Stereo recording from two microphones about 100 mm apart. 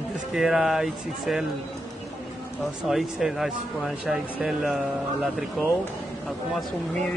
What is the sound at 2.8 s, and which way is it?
Speech, centre (ahead or behind).